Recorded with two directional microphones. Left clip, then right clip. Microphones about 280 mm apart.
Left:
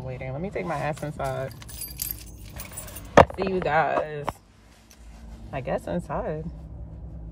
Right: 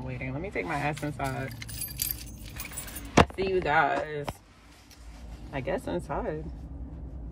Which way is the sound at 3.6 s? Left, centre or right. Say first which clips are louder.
Left 3 dB; centre.